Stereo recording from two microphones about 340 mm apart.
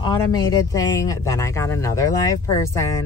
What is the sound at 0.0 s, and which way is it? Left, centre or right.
Speech, centre.